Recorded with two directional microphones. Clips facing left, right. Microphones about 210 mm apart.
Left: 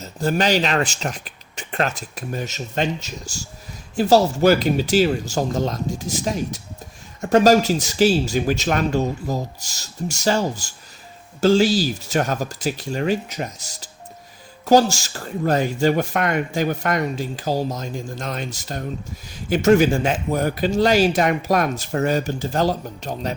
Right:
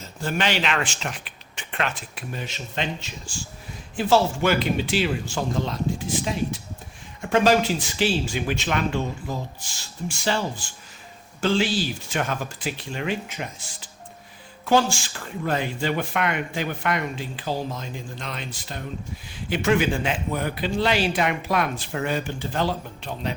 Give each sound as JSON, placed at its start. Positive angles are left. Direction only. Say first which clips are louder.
{"t": 0.0, "sound": "speech", "louder": "left 5 dB", "side_deg": 40}